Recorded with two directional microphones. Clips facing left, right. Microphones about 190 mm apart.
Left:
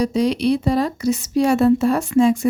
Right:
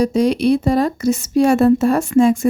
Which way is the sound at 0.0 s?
50° right (ahead or behind).